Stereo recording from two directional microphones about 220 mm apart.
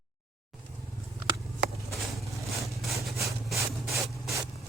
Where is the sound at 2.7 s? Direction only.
Centre (ahead or behind).